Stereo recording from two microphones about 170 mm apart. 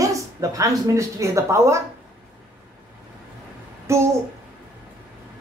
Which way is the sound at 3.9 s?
15° right (ahead or behind).